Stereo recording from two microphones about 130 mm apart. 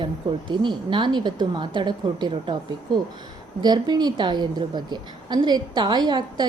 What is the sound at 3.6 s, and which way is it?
A woman's voice, 35° right (ahead or behind).